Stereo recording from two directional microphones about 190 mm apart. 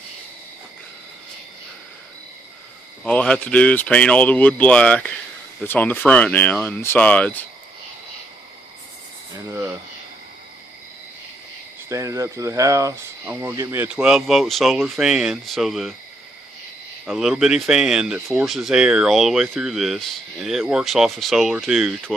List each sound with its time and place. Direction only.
3.0 s speech: 5° left (ahead or behind)
9.5 s a sound: 15° right (ahead or behind)
11.9 s speech: 15° right (ahead or behind)
17.0 s speech: 5° right (ahead or behind)